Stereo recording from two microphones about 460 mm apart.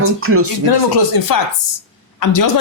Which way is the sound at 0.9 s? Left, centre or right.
Left.